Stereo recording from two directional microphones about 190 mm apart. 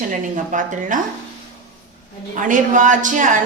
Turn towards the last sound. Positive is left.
turn(degrees=-40)  # may be behind; listen again after turning